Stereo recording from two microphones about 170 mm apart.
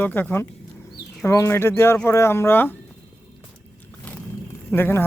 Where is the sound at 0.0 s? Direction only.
10° left (ahead or behind).